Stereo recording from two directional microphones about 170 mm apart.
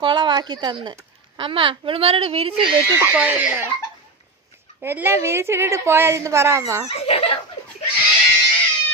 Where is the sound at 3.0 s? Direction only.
10° right (ahead or behind).